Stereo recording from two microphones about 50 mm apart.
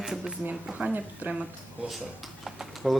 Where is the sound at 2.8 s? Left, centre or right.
Centre.